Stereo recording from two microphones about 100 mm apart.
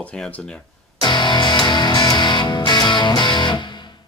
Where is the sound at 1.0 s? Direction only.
50° left (ahead or behind).